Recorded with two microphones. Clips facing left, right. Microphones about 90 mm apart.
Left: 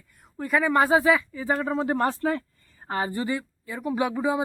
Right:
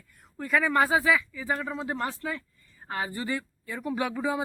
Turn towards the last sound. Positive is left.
turn(degrees=15)  # may be behind; listen again after turning